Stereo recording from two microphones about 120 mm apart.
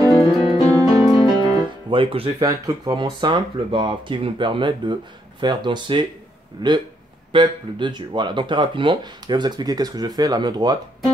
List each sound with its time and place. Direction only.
0.0 s music: 45° left (ahead or behind)
0.6 s music: 30° right (ahead or behind)
1.4 s music: 45° right (ahead or behind)
2.4 s speech: 30° right (ahead or behind)